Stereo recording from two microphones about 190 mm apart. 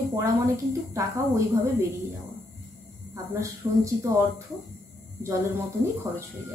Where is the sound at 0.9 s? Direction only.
15° right (ahead or behind).